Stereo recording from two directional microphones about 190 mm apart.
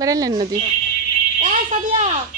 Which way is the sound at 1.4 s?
40° right (ahead or behind).